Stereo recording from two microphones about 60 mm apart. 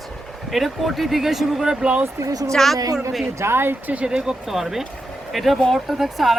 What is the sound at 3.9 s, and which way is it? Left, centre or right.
Speech, right.